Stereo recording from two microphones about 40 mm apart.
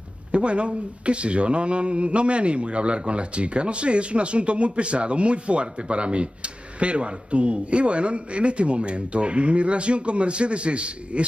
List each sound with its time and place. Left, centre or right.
0.3 s speech: right